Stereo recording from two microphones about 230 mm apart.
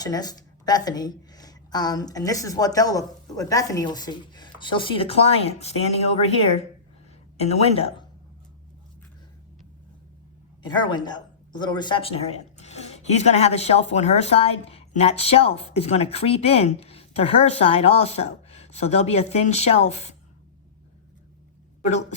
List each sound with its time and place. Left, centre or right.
0.0 s a woman's voice: centre
10.9 s speech: centre